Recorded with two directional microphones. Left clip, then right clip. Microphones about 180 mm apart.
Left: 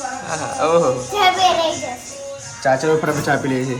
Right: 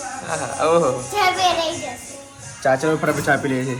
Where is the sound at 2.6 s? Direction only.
Centre (ahead or behind).